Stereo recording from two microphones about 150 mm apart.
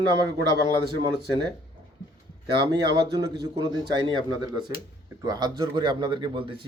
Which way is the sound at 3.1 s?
30° right (ahead or behind).